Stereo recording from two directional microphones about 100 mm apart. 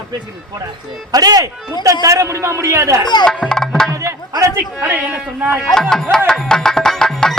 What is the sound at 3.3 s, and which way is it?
Music, 10° left (ahead or behind).